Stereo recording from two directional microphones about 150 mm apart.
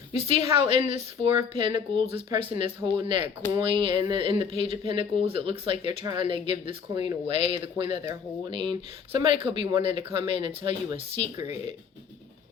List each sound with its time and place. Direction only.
0.1 s speech: 35° right (ahead or behind)